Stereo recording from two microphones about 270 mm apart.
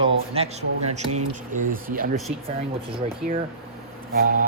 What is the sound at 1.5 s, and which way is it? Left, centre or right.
Speech, right.